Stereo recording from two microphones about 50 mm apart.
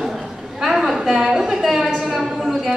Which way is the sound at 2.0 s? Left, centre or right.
Centre.